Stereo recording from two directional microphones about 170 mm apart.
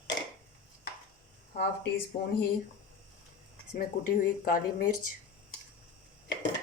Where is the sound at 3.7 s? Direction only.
55° left (ahead or behind).